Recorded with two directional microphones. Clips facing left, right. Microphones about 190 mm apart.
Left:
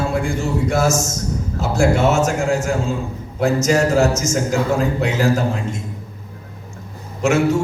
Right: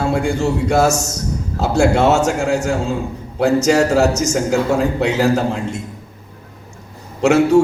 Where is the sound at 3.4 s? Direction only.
70° right (ahead or behind).